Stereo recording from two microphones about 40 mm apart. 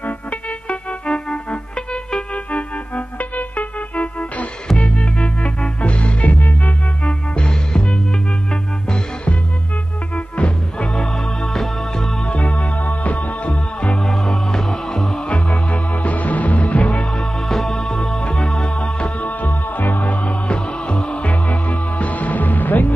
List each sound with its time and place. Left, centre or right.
0.0 s music: left
7.1 s music: left
10.1 s music: left
11.0 s music: centre
11.5 s music: centre
12.3 s music: left
13.9 s music: centre
15.2 s music: left
17.0 s music: centre
18.8 s music: left
19.4 s music: left
20.1 s music: left